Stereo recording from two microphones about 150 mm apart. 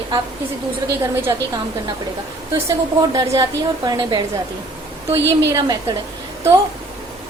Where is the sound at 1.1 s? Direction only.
15° right (ahead or behind).